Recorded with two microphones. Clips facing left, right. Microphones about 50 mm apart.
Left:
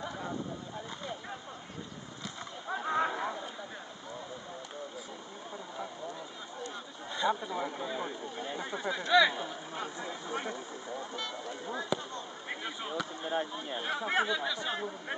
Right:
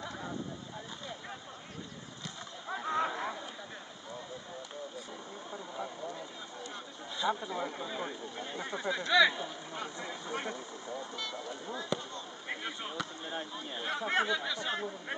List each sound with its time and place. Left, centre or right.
2.7 s a sound: centre
7.2 s speech: centre
11.9 s speech: centre
13.2 s speech: left
13.8 s speech: centre